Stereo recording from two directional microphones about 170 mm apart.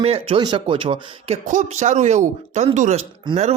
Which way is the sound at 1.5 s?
45° right (ahead or behind).